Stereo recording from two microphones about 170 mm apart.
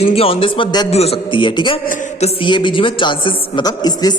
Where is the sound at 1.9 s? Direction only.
40° left (ahead or behind).